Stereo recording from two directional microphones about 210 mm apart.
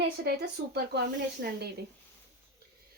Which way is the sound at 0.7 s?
50° right (ahead or behind).